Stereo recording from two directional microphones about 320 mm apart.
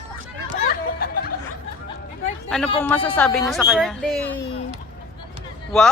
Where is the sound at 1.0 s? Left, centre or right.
Left.